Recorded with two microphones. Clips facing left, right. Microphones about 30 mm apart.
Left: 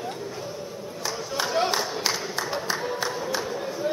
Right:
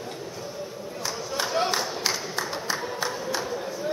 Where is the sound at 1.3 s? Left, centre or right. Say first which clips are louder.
Left 1 dB; centre.